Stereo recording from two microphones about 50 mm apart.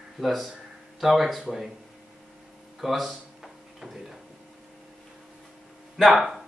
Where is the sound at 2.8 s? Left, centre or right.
Centre.